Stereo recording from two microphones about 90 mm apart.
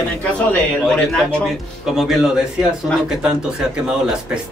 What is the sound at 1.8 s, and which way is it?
A man's voice, 5° right (ahead or behind).